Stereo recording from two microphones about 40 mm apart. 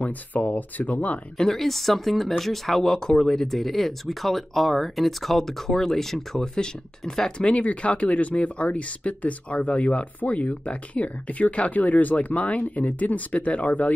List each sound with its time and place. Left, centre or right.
0.0 s speech: left
1.4 s speech: centre
7.3 s speech: left